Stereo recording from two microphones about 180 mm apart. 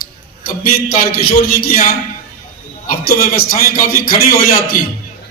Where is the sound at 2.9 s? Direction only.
55° left (ahead or behind).